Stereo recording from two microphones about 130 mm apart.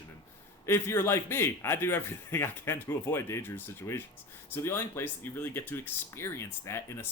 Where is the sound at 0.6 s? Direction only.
20° left (ahead or behind).